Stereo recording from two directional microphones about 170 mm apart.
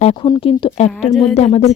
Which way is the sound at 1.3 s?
40° left (ahead or behind).